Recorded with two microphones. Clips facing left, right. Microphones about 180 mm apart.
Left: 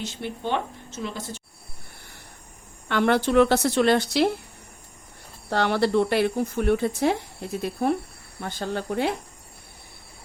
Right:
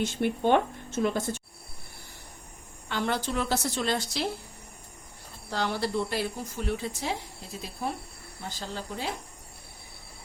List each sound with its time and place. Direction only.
0.0 s speech: 50° right (ahead or behind)
2.9 s speech: 65° left (ahead or behind)
5.5 s speech: 65° left (ahead or behind)